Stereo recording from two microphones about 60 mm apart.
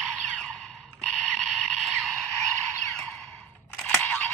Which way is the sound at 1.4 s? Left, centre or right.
Centre.